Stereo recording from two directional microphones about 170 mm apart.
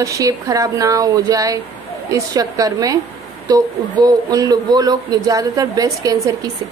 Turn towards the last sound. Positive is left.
turn(degrees=-20)  # may be behind; listen again after turning